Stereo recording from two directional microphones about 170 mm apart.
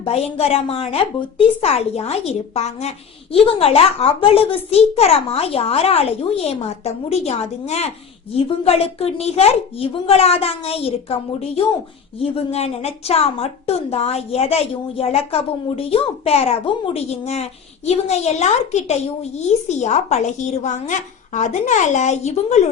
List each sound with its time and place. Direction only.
0.0 s a woman's voice: 35° left (ahead or behind)